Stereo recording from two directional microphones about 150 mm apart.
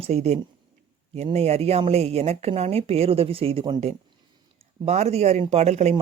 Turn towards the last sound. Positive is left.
turn(degrees=-45)  # may be behind; listen again after turning